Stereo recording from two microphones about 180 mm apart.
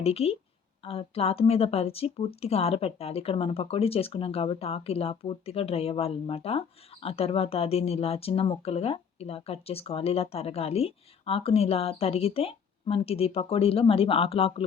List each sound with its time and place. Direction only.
0.0 s speech: 35° left (ahead or behind)